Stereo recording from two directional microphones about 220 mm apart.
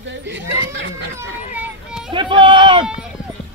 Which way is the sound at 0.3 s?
55° right (ahead or behind).